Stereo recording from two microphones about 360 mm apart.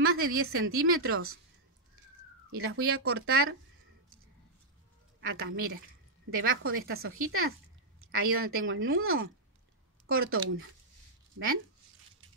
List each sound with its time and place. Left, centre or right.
0.0 s a woman's voice: right
2.5 s a woman's voice: right
5.2 s a woman's voice: right